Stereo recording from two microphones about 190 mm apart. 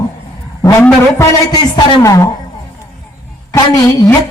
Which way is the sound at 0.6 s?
15° left (ahead or behind).